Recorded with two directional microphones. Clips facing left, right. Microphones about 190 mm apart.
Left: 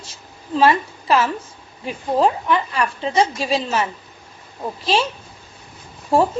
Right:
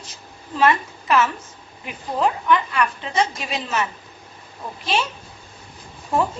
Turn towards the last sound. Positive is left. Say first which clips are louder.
# left 5 dB
turn(degrees=30)  # may be behind; listen again after turning